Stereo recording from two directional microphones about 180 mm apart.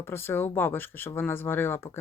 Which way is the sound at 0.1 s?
10° left (ahead or behind).